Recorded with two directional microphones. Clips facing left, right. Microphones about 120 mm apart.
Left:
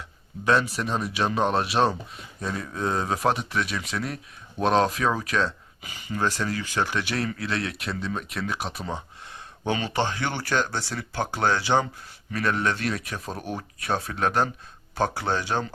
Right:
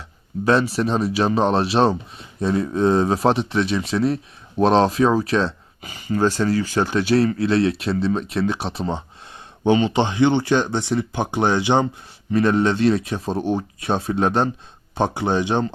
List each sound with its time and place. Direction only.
0.4 s speech: 30° right (ahead or behind)